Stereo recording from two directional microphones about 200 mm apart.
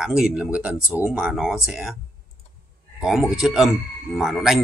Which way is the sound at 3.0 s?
Centre (ahead or behind).